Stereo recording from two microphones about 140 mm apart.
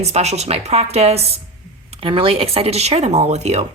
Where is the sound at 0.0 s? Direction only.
50° right (ahead or behind).